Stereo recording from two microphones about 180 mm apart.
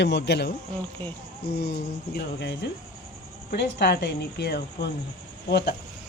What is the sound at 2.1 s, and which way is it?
Speech, 75° left (ahead or behind).